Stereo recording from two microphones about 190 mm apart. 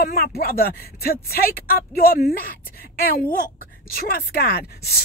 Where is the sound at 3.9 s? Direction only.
50° left (ahead or behind).